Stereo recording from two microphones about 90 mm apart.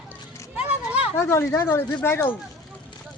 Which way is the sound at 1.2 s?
30° left (ahead or behind).